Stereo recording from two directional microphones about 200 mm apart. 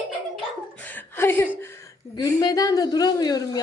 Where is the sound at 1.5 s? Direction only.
10° left (ahead or behind).